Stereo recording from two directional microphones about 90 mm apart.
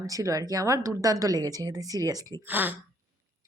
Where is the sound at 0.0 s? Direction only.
40° right (ahead or behind).